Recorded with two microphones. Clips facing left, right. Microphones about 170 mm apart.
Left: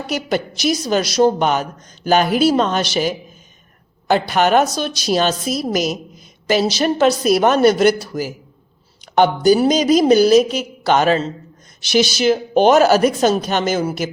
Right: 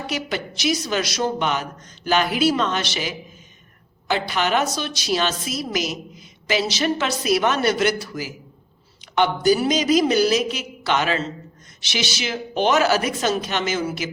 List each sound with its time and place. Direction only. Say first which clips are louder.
0.1 s a woman's voice: left 8 dB; 45° left (ahead or behind)